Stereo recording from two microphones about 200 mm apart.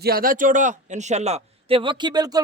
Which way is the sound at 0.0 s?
45° right (ahead or behind).